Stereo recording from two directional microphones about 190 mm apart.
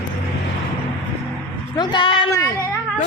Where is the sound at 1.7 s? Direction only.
25° left (ahead or behind).